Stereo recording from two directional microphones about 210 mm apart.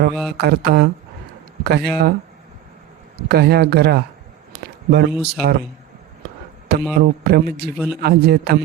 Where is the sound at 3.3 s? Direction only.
50° right (ahead or behind).